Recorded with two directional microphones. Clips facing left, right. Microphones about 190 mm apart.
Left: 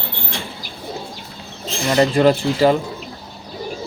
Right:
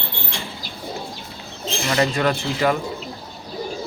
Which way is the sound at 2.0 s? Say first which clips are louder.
Left 7 dB; 30° left (ahead or behind).